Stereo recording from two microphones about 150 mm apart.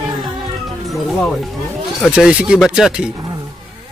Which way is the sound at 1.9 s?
Centre (ahead or behind).